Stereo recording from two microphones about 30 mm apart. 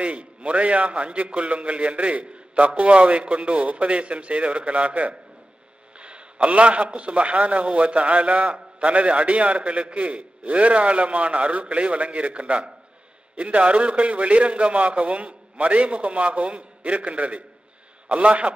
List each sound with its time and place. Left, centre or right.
0.0 s a man's voice: right